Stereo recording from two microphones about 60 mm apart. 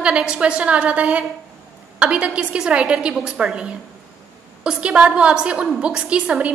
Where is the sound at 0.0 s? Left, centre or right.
Centre.